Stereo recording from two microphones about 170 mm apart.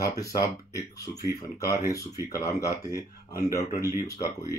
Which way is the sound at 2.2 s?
20° left (ahead or behind).